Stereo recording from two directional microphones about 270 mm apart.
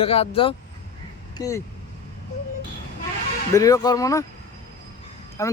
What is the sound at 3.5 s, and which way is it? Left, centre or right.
Speech, centre.